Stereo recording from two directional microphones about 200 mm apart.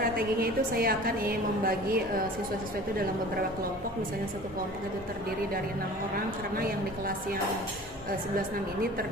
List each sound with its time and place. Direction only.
0.0 s a woman's voice: 50° right (ahead or behind)